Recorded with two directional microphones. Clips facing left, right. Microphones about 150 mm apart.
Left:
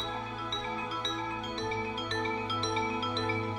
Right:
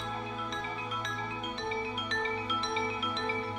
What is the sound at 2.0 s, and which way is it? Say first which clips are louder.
Music: left 1 dB; 35° left (ahead or behind).